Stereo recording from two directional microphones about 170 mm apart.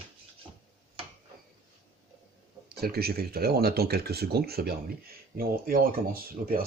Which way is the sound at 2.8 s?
65° right (ahead or behind).